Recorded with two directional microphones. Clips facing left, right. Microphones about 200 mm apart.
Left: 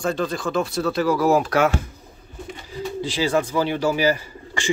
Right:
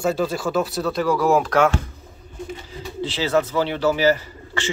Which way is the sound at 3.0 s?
10° left (ahead or behind).